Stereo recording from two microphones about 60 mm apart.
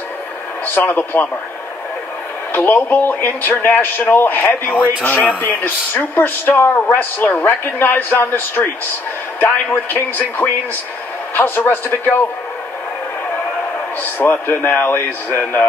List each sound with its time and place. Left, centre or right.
0.7 s speech: left
2.5 s speech: left
6.1 s speech: left
14.1 s speech: left